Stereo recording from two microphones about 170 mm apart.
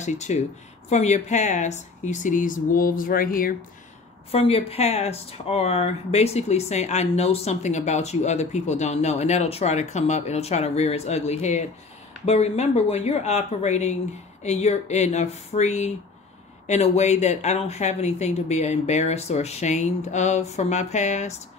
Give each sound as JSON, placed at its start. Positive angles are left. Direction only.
{"t": 0.0, "sound": "speech", "side_deg": 40}
{"t": 4.3, "sound": "speech", "side_deg": 35}